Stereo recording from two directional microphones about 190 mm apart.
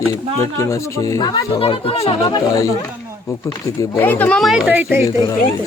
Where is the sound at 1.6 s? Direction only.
30° left (ahead or behind); by 5.0 s 10° right (ahead or behind).